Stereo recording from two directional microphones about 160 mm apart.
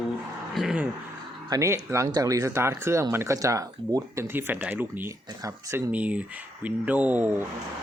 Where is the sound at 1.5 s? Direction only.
20° right (ahead or behind).